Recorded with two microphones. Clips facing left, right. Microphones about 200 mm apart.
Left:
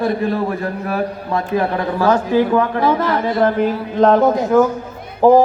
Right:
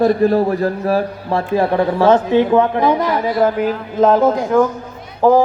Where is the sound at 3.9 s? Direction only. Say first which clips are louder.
Even; 5° right (ahead or behind).